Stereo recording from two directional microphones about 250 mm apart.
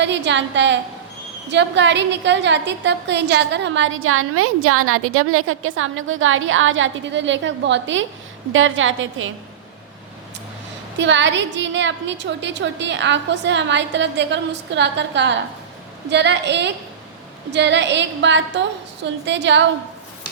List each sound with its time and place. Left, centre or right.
0.0 s a woman's voice: right
10.9 s a woman's voice: right